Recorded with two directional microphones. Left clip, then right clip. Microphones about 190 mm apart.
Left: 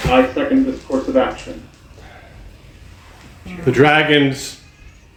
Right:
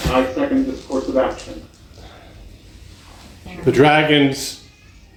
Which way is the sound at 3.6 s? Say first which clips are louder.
Even; 15° left (ahead or behind).